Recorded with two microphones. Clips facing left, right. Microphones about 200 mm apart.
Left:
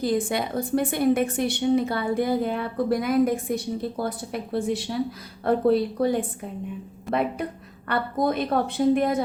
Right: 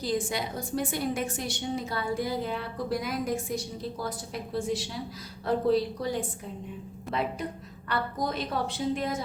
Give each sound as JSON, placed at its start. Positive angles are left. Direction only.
{"t": 0.0, "sound": "a woman's voice", "side_deg": 55}